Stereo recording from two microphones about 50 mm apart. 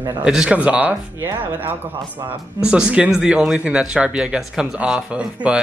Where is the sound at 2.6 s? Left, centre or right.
Centre.